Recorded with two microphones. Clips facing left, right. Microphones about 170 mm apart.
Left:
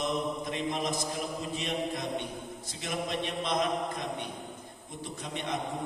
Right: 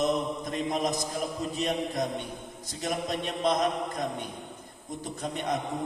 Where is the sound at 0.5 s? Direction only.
40° right (ahead or behind).